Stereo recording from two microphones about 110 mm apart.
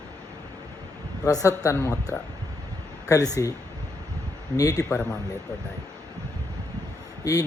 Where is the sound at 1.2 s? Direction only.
30° left (ahead or behind).